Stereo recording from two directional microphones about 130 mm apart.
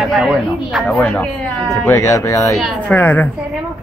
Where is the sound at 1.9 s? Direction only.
20° left (ahead or behind).